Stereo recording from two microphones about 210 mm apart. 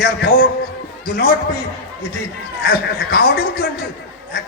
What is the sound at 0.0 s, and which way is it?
A man's voice, 45° left (ahead or behind).